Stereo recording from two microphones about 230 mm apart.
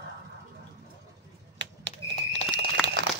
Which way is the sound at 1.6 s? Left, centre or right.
Right.